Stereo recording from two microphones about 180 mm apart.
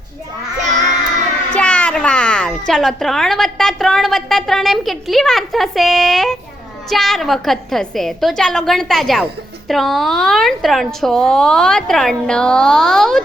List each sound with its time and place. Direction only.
0.6 s child singing: 45° right (ahead or behind)
1.5 s a child's voice: 5° left (ahead or behind)